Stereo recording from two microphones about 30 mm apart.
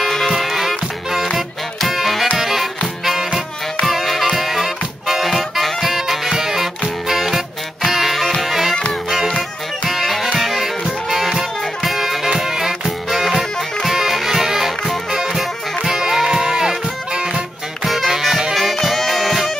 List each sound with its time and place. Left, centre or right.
0.0 s music: centre
3.8 s music: centre
10.0 s music: centre; by 17.3 s right
17.8 s music: centre
18.8 s brass instrument: centre